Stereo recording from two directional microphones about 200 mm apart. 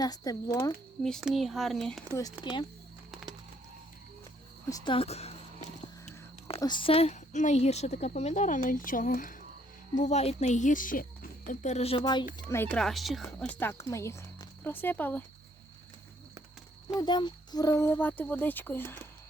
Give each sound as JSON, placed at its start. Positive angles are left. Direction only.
{"t": 0.0, "sound": "speech", "side_deg": 20}
{"t": 1.0, "sound": "speech", "side_deg": 0}
{"t": 2.4, "sound": "speech", "side_deg": 25}
{"t": 4.7, "sound": "a woman's voice", "side_deg": 25}
{"t": 12.4, "sound": "speech", "side_deg": 15}
{"t": 12.7, "sound": "speech", "side_deg": 0}
{"t": 13.4, "sound": "speech", "side_deg": 10}
{"t": 16.9, "sound": "speech", "side_deg": 20}